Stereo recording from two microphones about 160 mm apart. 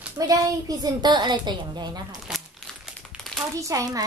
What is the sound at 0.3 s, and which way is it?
A woman's voice, 25° right (ahead or behind).